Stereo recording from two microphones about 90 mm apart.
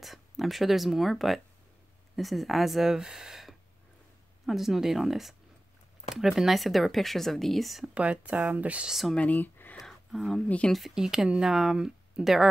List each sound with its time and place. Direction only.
0.0 s speech: centre (ahead or behind)
7.9 s speech: 15° right (ahead or behind)
9.1 s speech: 15° left (ahead or behind)
9.8 s a sound: centre (ahead or behind)
10.7 s speech: 5° right (ahead or behind)